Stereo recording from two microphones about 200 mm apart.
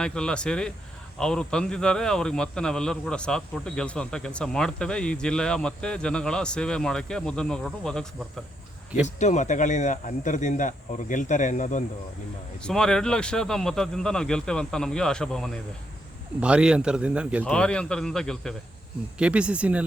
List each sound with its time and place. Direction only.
0.0 s a man's voice: 5° left (ahead or behind)
9.0 s speech: 35° left (ahead or behind)
12.6 s a man's voice: 5° left (ahead or behind)
17.4 s a man's voice: 5° left (ahead or behind)